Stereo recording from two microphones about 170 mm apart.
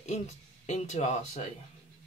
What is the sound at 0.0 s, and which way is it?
Speech, 40° left (ahead or behind).